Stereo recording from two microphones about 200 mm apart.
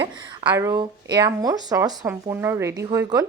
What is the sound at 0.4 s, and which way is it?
Speech, 15° right (ahead or behind).